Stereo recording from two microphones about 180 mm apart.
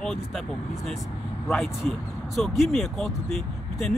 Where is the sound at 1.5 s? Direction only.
Centre (ahead or behind).